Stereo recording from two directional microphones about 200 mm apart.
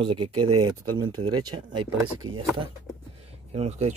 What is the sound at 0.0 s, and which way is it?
Speech, 25° right (ahead or behind).